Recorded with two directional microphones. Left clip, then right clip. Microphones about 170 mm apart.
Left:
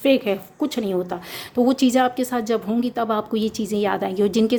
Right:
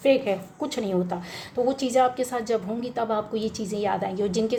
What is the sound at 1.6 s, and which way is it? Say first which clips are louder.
A woman's voice: left 3 dB; 40° left (ahead or behind).